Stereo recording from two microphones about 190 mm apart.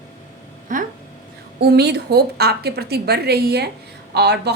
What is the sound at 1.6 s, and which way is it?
A woman's voice, 60° right (ahead or behind).